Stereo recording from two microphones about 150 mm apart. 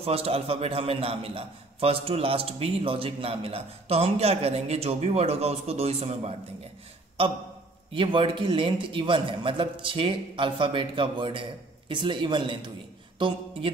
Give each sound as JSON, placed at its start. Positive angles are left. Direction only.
{"t": 0.0, "sound": "a man's voice", "side_deg": -40}